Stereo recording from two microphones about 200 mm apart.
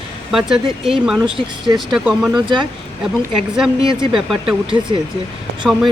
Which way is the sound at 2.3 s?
25° right (ahead or behind).